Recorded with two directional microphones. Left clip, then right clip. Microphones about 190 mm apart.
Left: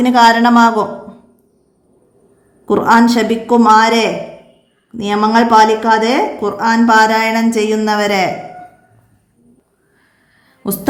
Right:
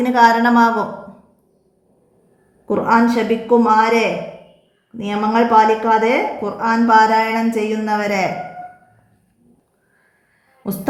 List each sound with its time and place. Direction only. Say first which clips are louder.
0.0 s a woman's voice: left 3 dB; 25° left (ahead or behind)
2.6 s a woman's voice: left 5 dB; 35° left (ahead or behind)
5.0 s a woman's voice: left 5 dB; 35° left (ahead or behind)
10.6 s a woman's voice: left 5 dB; 25° left (ahead or behind)